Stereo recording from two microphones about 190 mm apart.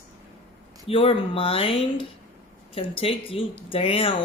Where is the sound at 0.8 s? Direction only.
30° left (ahead or behind).